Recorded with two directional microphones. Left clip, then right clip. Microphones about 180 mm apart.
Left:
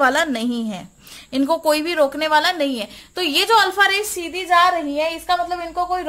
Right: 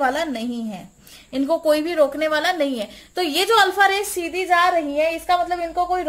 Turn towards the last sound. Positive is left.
turn(degrees=30)  # may be behind; listen again after turning